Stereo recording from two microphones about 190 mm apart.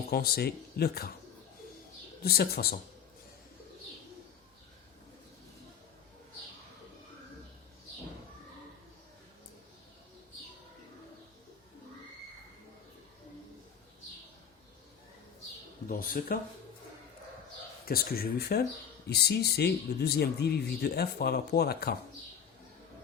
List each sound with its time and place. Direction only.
0.1 s speech: 55° left (ahead or behind)
2.2 s speech: 55° left (ahead or behind)
15.9 s speech: 50° left (ahead or behind)
17.8 s speech: 50° left (ahead or behind)